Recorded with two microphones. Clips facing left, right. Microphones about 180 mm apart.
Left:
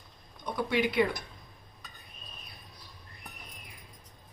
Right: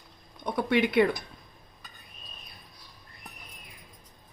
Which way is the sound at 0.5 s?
55° right (ahead or behind).